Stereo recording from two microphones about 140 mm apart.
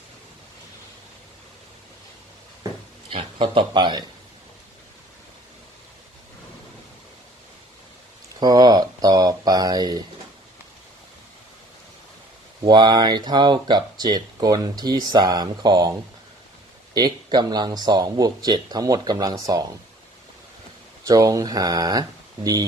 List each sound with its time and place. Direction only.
3.1 s speech: 40° right (ahead or behind)
8.4 s a sound: 30° right (ahead or behind)
12.6 s speech: 30° right (ahead or behind)
21.1 s speech: 25° right (ahead or behind)